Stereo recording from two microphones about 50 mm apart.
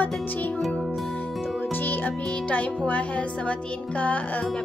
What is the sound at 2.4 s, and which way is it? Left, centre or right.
Music, left.